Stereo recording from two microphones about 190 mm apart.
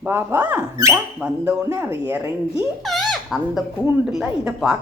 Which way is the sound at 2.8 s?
Centre (ahead or behind).